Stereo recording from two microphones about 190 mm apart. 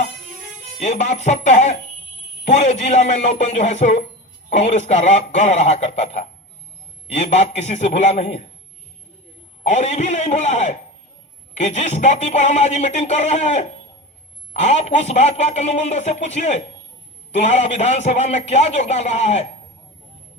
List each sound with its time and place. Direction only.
0.8 s speech: 35° left (ahead or behind)
9.6 s speech: 35° left (ahead or behind)